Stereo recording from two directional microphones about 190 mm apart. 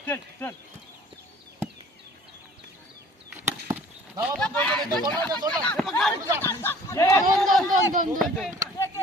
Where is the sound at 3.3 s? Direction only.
10° right (ahead or behind).